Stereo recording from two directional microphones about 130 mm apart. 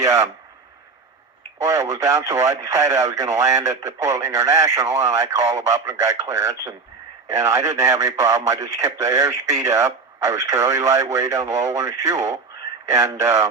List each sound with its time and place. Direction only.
1.6 s speech: 25° right (ahead or behind)